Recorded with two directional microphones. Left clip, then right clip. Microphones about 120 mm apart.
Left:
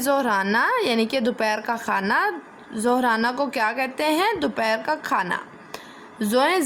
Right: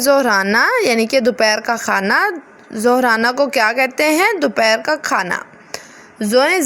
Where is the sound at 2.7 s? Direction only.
45° right (ahead or behind).